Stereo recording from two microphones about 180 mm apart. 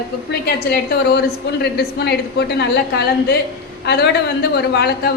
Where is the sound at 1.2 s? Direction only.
65° left (ahead or behind).